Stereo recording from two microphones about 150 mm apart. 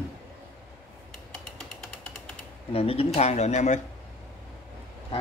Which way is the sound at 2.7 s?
40° left (ahead or behind).